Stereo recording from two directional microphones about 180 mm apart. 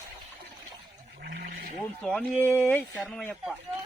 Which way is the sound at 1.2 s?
60° right (ahead or behind).